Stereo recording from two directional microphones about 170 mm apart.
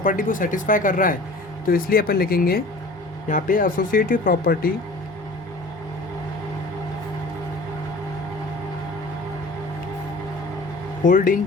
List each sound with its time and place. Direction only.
0.0 s speech: 50° left (ahead or behind)
11.0 s speech: 50° left (ahead or behind)